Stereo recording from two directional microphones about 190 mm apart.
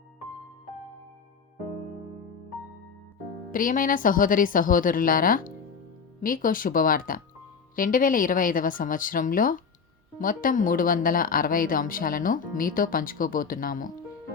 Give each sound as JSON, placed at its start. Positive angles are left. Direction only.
{"t": 3.5, "sound": "speech", "side_deg": 45}